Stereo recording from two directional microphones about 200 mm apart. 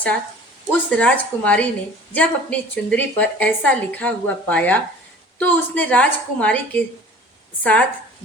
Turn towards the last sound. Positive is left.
turn(degrees=5)  # may be behind; listen again after turning